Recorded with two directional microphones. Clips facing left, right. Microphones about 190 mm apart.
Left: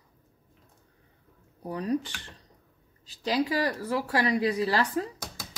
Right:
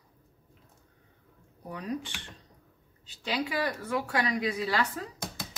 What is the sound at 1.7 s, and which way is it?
A woman's voice, 35° left (ahead or behind).